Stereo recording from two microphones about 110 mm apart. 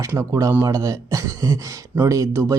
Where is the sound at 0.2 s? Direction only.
30° right (ahead or behind).